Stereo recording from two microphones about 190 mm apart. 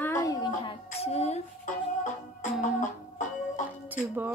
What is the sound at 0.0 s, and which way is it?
Music, 15° left (ahead or behind).